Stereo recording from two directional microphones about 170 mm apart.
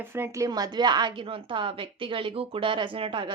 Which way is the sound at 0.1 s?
15° right (ahead or behind).